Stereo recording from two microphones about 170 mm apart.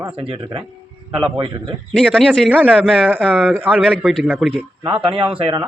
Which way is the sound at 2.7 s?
5° left (ahead or behind).